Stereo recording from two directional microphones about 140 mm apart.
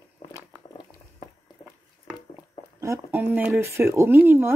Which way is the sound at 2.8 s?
20° right (ahead or behind).